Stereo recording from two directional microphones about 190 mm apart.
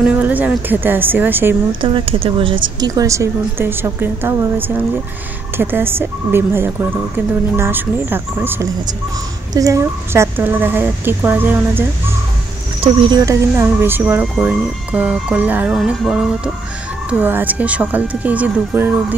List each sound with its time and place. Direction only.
0.0 s speech: 5° right (ahead or behind)
1.8 s speech: 25° right (ahead or behind); by 11.8 s 10° right (ahead or behind)
12.8 s speech: 20° right (ahead or behind)